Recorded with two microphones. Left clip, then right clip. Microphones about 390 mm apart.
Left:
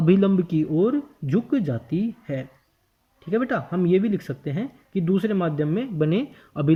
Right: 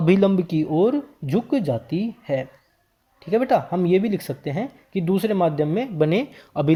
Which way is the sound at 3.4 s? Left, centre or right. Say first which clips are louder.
Right 6 dB; centre.